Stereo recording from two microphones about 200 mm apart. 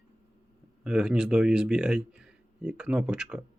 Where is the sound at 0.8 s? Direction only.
5° right (ahead or behind).